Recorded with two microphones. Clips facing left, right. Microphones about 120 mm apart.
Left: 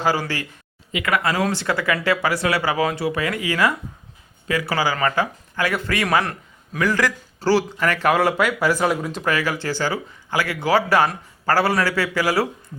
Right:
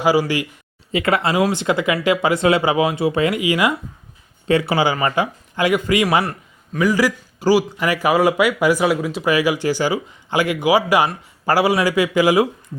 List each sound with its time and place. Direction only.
0.0 s speech: 10° right (ahead or behind)
0.9 s speech: 25° right (ahead or behind)